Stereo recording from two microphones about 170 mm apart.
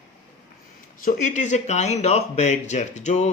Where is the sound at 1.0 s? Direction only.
45° left (ahead or behind).